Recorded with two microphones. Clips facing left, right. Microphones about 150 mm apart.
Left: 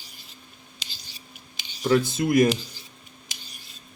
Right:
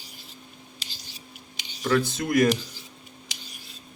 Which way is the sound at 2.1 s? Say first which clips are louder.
Left 2 dB; 15° left (ahead or behind).